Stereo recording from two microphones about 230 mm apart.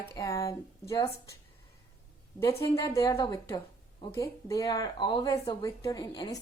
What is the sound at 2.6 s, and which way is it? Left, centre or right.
Speech, centre.